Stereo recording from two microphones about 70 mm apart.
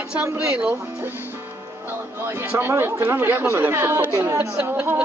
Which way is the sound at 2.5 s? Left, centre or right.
Right.